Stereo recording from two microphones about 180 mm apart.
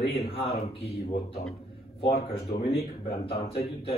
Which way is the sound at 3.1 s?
35° left (ahead or behind).